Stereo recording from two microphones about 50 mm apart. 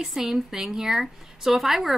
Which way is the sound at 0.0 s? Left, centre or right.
Centre.